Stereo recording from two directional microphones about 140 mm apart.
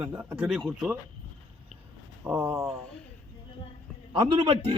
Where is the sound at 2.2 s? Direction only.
15° right (ahead or behind).